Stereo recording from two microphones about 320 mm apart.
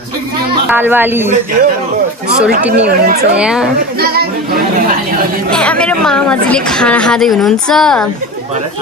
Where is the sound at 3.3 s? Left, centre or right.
Centre.